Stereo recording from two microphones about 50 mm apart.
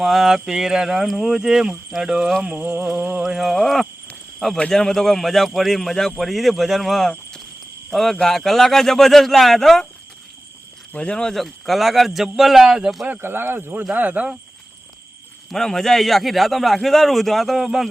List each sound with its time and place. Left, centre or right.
0.0 s speech: centre
2.6 s speech: right
3.2 s a man's voice: centre
10.9 s speech: left
11.3 s a man's voice: centre
13.2 s speech: right
13.9 s speech: right
15.4 s a man's voice: centre